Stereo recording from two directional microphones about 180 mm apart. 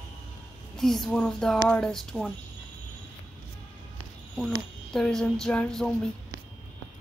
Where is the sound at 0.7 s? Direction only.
Centre (ahead or behind).